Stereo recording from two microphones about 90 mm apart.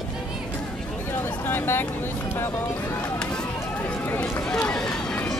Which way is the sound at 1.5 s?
25° left (ahead or behind).